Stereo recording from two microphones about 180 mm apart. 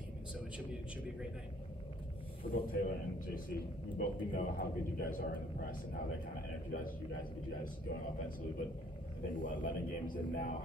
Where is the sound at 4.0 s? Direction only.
50° left (ahead or behind).